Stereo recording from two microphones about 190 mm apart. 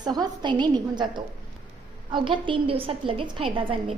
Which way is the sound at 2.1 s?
25° right (ahead or behind).